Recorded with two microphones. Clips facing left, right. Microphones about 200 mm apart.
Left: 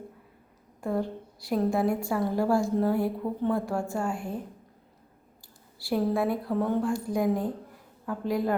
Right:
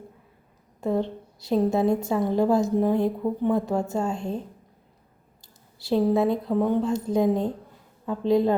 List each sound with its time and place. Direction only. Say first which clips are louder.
0.8 s a woman's voice: right 4 dB; 20° right (ahead or behind)
5.8 s a woman's voice: right 5 dB; 20° right (ahead or behind)